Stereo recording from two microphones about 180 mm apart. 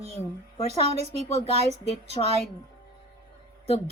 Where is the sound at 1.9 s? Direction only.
35° left (ahead or behind).